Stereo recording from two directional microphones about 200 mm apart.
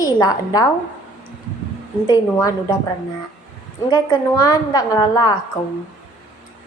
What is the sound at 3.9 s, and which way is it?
A woman's voice, 15° left (ahead or behind).